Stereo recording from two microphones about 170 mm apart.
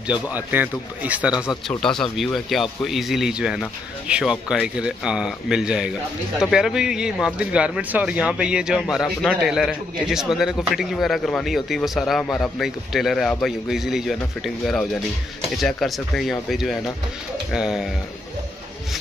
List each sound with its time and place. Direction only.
0.3 s speech: 10° right (ahead or behind)
1.3 s speech: 25° left (ahead or behind)
1.7 s a man's voice: 5° left (ahead or behind)